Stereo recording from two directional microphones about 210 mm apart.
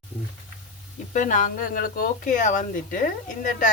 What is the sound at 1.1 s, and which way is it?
Speech, 40° left (ahead or behind).